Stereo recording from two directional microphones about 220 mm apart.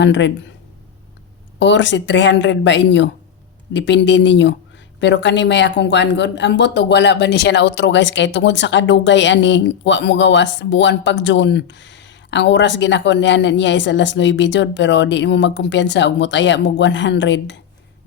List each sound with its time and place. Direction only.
0.0 s speech: 55° left (ahead or behind)
1.5 s speech: 55° left (ahead or behind)